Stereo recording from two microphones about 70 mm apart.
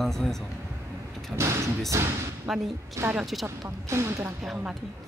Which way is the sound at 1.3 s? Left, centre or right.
Right.